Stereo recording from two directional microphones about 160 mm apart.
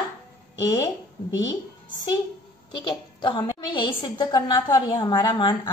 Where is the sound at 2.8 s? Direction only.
30° left (ahead or behind).